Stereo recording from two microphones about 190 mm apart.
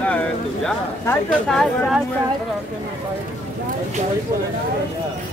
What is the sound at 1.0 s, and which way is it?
Speech, 5° left (ahead or behind).